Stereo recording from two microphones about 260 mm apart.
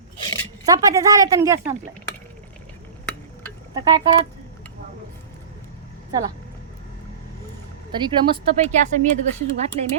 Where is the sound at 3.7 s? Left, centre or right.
Centre.